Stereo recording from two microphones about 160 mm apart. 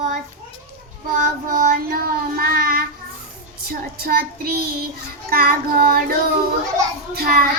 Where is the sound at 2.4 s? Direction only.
70° right (ahead or behind).